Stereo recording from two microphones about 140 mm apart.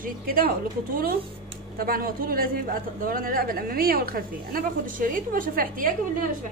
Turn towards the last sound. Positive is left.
turn(degrees=-75)  # may be behind; listen again after turning